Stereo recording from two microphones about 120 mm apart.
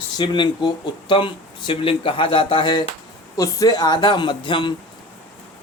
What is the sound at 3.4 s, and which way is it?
Speech, 30° left (ahead or behind).